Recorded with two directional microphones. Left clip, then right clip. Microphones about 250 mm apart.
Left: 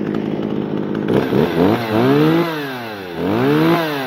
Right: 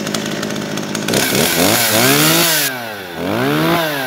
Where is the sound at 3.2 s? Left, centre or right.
Right.